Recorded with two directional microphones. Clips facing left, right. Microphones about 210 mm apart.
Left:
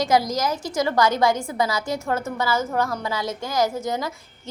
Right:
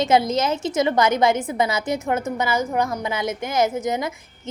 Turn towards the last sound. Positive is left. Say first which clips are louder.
# right 2 dB
turn(degrees=-20)  # may be behind; listen again after turning